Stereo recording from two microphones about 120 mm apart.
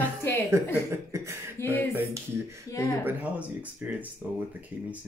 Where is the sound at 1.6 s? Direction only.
20° left (ahead or behind).